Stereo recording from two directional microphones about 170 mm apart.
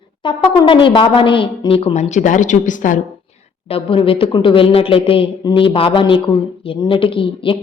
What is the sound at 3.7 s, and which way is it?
A woman's voice, 30° left (ahead or behind).